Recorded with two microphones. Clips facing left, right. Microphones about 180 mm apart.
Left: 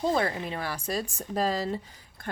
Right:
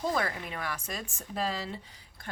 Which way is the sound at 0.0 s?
25° left (ahead or behind).